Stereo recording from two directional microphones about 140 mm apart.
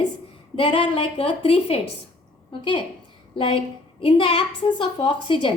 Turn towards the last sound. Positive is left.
turn(degrees=35)  # may be behind; listen again after turning